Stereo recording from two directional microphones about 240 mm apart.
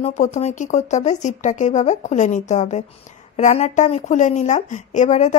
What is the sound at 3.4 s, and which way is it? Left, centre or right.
A woman's voice, left.